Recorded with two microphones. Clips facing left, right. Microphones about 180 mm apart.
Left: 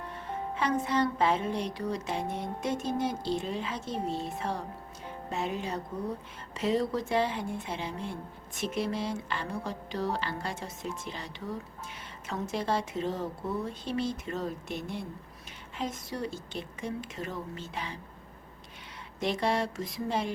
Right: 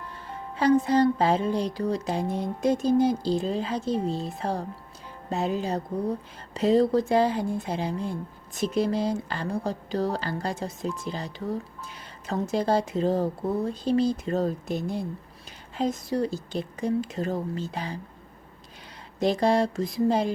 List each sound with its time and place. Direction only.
0.5 s a woman's voice: 35° right (ahead or behind)
19.2 s a woman's voice: 35° right (ahead or behind)